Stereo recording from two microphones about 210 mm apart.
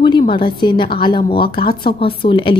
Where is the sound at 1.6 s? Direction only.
45° left (ahead or behind).